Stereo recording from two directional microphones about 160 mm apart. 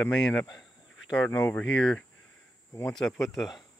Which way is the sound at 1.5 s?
10° left (ahead or behind).